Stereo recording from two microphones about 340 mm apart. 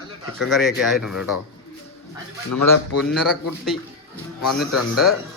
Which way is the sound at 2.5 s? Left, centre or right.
Left.